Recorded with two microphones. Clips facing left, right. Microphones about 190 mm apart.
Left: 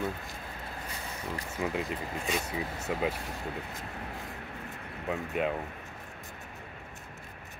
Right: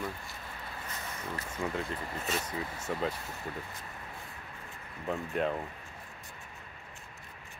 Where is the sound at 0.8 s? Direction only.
10° left (ahead or behind).